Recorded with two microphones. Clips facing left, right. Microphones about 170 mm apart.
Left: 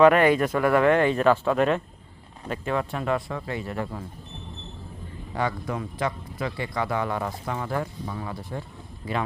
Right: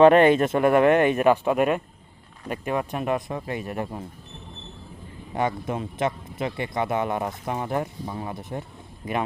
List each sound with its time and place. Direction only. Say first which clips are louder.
0.0 s speech: right 2 dB; 25° right (ahead or behind)
5.3 s speech: right 2 dB; 20° right (ahead or behind)